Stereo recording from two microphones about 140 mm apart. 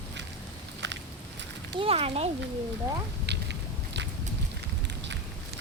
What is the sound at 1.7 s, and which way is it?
Speech, 45° right (ahead or behind).